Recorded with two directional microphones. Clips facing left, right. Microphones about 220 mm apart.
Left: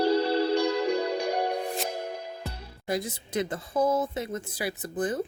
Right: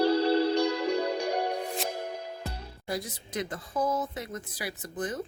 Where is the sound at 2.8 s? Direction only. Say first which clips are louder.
Left 4 dB; 25° left (ahead or behind).